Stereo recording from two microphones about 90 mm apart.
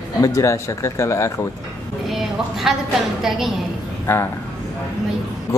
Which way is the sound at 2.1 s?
Centre (ahead or behind).